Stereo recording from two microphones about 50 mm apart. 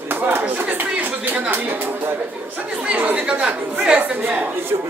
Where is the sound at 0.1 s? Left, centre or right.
Right.